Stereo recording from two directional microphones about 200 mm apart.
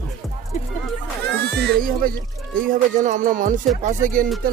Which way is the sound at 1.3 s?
55° right (ahead or behind).